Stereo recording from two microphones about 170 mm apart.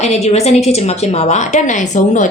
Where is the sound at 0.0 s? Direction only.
40° left (ahead or behind).